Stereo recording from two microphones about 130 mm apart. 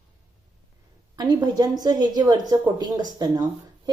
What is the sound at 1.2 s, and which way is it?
A woman's voice, 30° right (ahead or behind).